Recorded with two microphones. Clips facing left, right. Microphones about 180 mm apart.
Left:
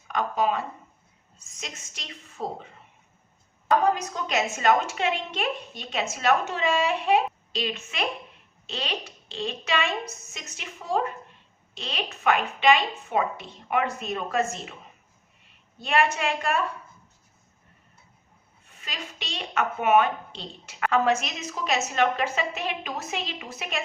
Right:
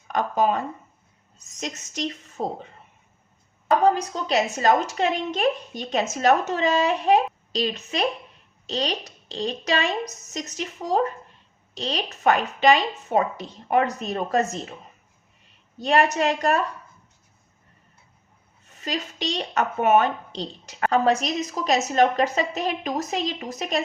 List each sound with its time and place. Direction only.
0.1 s a woman's voice: 45° right (ahead or behind)
3.9 s a woman's voice: 35° right (ahead or behind)
15.8 s a woman's voice: 40° right (ahead or behind)
18.8 s a woman's voice: 40° right (ahead or behind)